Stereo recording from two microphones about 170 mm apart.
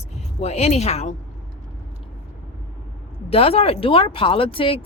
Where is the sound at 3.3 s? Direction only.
35° left (ahead or behind).